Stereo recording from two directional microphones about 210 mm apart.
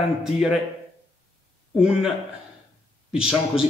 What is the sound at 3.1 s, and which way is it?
Speech, 5° right (ahead or behind).